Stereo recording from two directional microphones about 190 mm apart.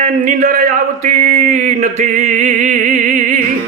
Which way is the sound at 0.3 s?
40° right (ahead or behind).